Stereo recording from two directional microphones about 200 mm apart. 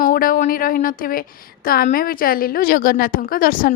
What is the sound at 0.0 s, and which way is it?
A woman's voice, 45° left (ahead or behind).